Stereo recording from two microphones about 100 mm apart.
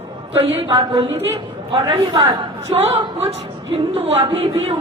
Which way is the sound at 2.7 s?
90° right.